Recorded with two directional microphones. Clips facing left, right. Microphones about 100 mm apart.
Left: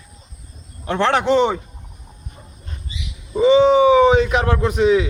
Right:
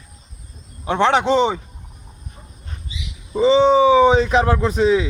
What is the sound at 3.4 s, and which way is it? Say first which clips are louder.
A man's voice: left 1 dB; 30° right (ahead or behind).